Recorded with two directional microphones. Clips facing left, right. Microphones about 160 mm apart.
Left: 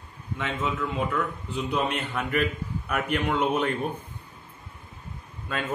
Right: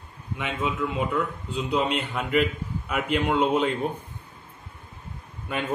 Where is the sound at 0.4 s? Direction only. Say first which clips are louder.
Right 1 dB; 15° right (ahead or behind).